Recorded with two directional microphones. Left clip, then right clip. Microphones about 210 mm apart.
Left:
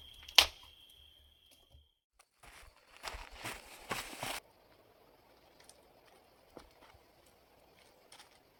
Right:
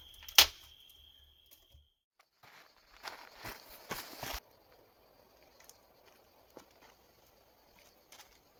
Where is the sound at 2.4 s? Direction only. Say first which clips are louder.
Left 1 dB; 45° left (ahead or behind).